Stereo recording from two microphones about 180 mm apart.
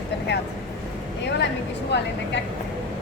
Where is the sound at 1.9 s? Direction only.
75° left (ahead or behind).